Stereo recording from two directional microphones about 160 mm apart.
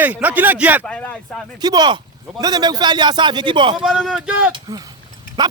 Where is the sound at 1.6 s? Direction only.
25° right (ahead or behind).